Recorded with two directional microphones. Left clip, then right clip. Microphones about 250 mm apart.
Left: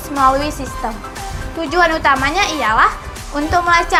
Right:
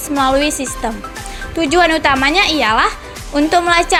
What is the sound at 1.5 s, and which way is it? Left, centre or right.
A woman's voice, right.